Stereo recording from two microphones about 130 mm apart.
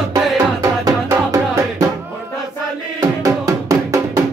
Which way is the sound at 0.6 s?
25° right (ahead or behind).